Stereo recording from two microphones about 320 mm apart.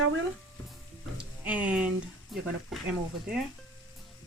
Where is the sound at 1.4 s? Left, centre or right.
Centre.